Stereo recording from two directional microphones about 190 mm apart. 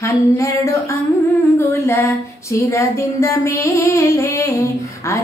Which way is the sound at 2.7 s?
15° left (ahead or behind).